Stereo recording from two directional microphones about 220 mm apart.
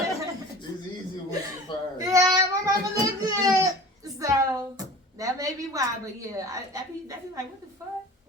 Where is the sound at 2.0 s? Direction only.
15° right (ahead or behind).